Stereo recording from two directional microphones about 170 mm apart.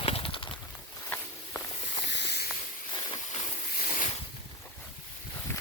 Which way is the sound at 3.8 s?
55° left (ahead or behind).